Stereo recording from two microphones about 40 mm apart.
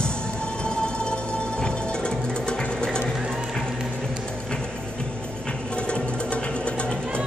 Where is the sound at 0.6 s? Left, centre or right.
Left.